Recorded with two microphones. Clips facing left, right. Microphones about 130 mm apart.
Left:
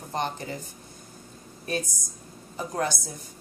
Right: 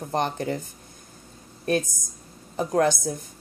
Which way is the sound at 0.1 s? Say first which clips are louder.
Right 5 dB; 55° right (ahead or behind).